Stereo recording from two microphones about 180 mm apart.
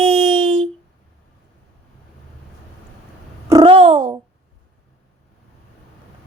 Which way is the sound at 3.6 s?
30° right (ahead or behind).